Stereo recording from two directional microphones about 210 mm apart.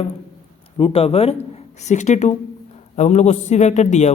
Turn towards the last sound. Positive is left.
turn(degrees=35)  # may be behind; listen again after turning